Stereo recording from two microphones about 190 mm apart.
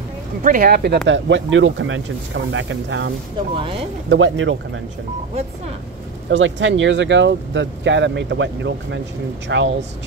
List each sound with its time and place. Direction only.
0.4 s speech: 45° right (ahead or behind); by 3.1 s 80° right
3.5 s speech: 30° right (ahead or behind)
4.1 s speech: 90° right
6.3 s speech: 80° right